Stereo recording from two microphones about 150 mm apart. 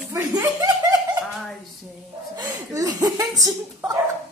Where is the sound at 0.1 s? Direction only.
20° right (ahead or behind).